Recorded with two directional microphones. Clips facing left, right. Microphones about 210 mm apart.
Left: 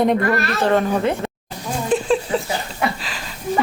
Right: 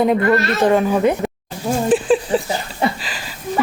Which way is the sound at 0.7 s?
10° right (ahead or behind).